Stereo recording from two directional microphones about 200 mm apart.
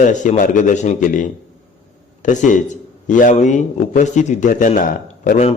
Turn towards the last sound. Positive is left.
turn(degrees=40)  # may be behind; listen again after turning